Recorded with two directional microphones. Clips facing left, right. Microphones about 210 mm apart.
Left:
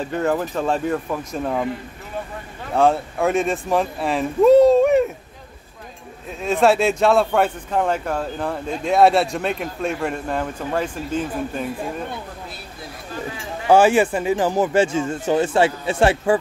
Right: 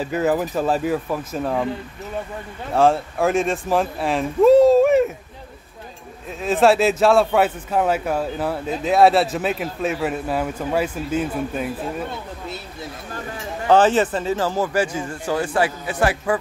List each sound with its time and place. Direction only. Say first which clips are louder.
0.0 s a man's voice: right 1 dB; 5° right (ahead or behind)
2.7 s speech: right 1 dB; centre (ahead or behind)
6.4 s a man's voice: right 1 dB; centre (ahead or behind)
13.7 s speech: left 1 dB; 10° left (ahead or behind); by 16.3 s 25° left (ahead or behind)